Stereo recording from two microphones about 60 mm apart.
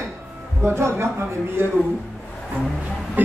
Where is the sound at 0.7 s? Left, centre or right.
Right.